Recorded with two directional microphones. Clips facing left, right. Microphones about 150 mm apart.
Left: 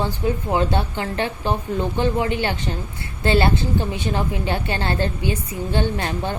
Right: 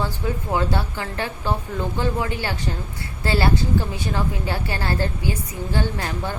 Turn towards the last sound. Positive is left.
turn(degrees=25)  # may be behind; listen again after turning